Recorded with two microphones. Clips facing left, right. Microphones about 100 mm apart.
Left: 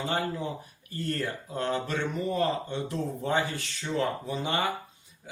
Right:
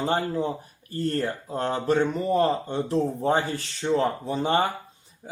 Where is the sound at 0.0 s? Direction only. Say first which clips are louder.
Right 5 dB; 35° right (ahead or behind).